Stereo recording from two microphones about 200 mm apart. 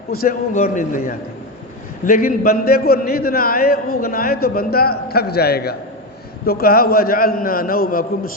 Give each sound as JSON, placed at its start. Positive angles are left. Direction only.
{"t": 0.2, "sound": "a man's voice", "side_deg": 45}